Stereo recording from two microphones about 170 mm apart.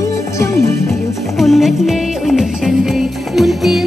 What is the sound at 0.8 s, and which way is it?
Music, centre (ahead or behind).